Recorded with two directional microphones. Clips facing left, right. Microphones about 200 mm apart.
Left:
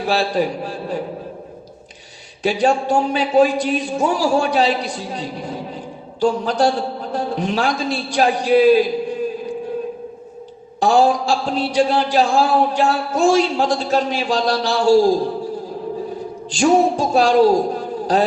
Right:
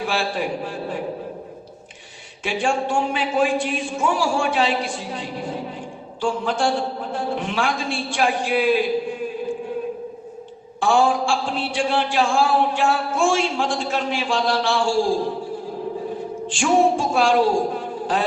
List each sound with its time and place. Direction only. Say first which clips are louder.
0.0 s a man's voice: left 5 dB; 40° left (ahead or behind)
2.4 s a man's voice: left 5 dB; 40° left (ahead or behind)
10.8 s a man's voice: left 3 dB; 40° left (ahead or behind)
16.5 s a man's voice: left 3 dB; 40° left (ahead or behind)